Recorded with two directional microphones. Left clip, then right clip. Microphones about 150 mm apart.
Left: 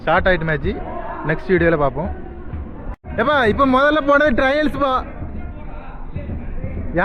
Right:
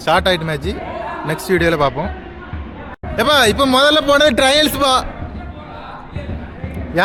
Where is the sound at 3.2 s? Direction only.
20° right (ahead or behind).